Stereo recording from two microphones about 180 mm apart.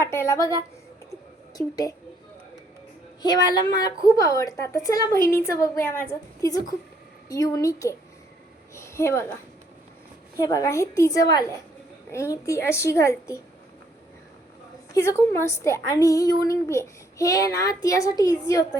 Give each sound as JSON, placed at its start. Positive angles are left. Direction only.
{"t": 0.0, "sound": "a woman's voice", "side_deg": 15}
{"t": 1.5, "sound": "a woman's voice", "side_deg": 20}
{"t": 3.2, "sound": "a woman's voice", "side_deg": 20}
{"t": 10.3, "sound": "a woman's voice", "side_deg": 20}
{"t": 14.9, "sound": "a woman's voice", "side_deg": 15}